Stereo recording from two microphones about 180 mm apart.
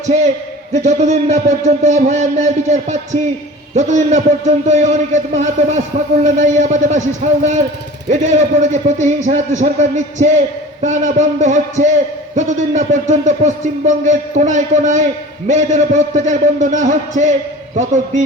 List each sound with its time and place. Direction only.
0.0 s a man's voice: 40° right (ahead or behind)
8.1 s a man's voice: 40° right (ahead or behind)